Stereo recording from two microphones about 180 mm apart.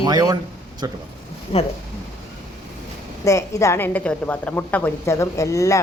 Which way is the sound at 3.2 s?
15° left (ahead or behind).